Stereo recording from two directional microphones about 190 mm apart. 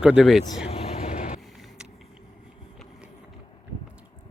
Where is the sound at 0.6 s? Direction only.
30° left (ahead or behind).